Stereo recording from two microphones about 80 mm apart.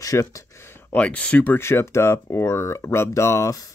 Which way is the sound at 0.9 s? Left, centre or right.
Centre.